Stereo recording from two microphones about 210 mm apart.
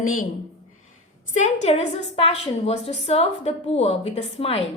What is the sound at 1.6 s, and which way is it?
A woman's voice, 30° left (ahead or behind).